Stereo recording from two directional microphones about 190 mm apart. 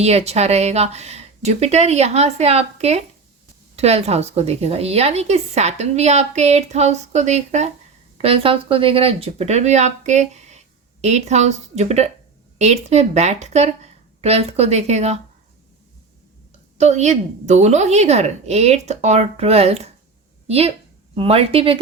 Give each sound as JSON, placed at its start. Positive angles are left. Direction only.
{"t": 0.0, "sound": "a woman's voice", "side_deg": -35}
{"t": 16.7, "sound": "a woman's voice", "side_deg": -35}